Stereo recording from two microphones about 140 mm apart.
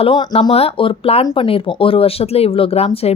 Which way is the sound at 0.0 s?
40° left (ahead or behind).